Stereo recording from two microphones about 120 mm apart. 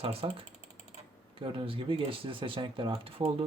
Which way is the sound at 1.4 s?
50° right (ahead or behind).